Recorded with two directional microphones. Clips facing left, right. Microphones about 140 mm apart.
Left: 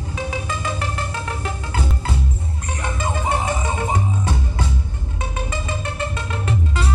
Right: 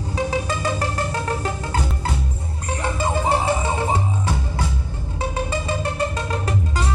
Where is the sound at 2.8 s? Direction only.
25° right (ahead or behind).